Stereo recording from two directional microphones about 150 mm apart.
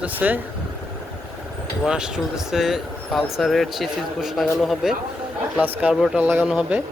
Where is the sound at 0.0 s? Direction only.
10° right (ahead or behind).